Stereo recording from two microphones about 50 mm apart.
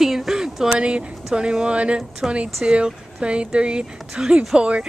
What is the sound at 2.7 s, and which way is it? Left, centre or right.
Speech, centre.